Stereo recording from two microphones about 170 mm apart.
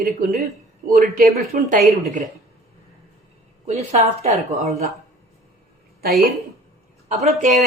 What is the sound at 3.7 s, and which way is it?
Speech, 40° right (ahead or behind).